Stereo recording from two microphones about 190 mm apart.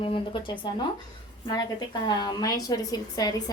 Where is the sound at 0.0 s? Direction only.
25° left (ahead or behind).